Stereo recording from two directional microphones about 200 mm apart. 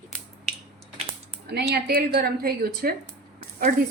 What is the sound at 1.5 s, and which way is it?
A woman's voice, 55° right (ahead or behind).